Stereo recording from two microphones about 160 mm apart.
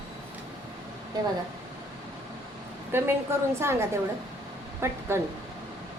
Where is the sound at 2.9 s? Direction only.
15° right (ahead or behind).